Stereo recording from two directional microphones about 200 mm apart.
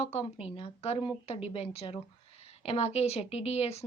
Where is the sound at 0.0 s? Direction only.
30° left (ahead or behind).